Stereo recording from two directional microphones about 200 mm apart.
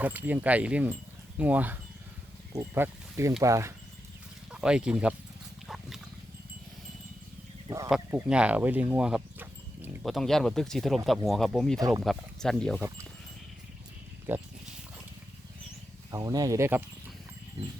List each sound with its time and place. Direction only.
0.0 s speech: 10° right (ahead or behind)
4.5 s speech: 5° right (ahead or behind)
5.6 s pig: centre (ahead or behind)
7.9 s speech: 5° right (ahead or behind)
14.3 s speech: 10° right (ahead or behind)
16.1 s speech: 20° right (ahead or behind)